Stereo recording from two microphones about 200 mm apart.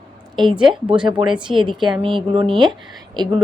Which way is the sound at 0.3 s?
25° right (ahead or behind).